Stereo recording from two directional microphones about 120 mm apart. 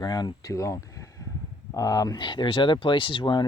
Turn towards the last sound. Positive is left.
turn(degrees=40)  # may be behind; listen again after turning